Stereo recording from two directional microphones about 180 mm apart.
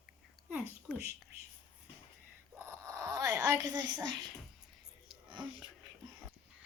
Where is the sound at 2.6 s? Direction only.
15° right (ahead or behind).